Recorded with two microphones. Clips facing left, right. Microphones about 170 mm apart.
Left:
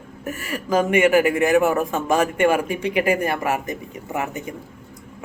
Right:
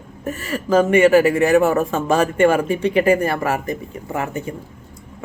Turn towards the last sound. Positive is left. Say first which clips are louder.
# right 2 dB
turn(degrees=15)  # may be behind; listen again after turning